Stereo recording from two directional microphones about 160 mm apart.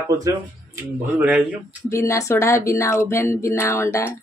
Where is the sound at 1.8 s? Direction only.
20° left (ahead or behind).